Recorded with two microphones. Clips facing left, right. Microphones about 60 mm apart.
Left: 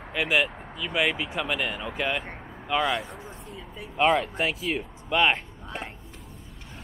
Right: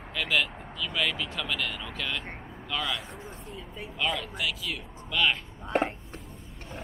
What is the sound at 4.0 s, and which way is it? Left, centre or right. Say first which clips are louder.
Speech: left 9 dB; left.